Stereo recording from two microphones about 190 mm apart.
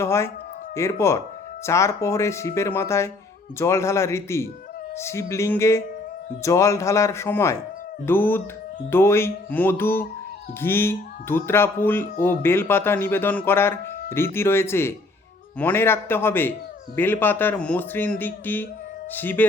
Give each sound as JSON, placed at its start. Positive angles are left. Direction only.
{"t": 0.0, "sound": "a man's voice", "side_deg": 15}